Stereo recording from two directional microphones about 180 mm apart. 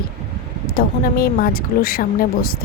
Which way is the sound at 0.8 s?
55° left (ahead or behind).